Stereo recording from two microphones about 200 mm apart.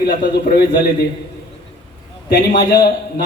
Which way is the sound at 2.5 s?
50° left (ahead or behind).